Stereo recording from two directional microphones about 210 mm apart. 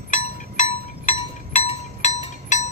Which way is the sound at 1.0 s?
30° left (ahead or behind).